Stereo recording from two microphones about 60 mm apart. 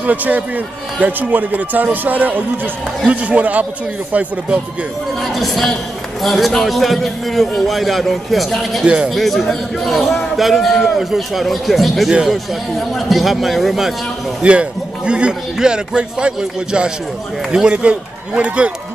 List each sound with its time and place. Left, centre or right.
0.0 s a man's voice: right
1.3 s a man's voice: right
5.2 s a man's voice: centre
8.8 s a man's voice: centre
9.1 s a man's voice: centre
14.4 s a man's voice: centre